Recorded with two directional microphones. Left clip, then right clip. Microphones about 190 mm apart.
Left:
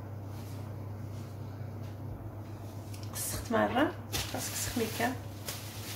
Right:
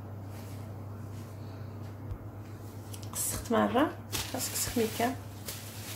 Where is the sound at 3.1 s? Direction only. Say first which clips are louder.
Right 2 dB; 40° right (ahead or behind).